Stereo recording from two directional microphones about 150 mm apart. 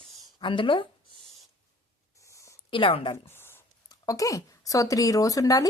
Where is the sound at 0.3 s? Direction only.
35° left (ahead or behind).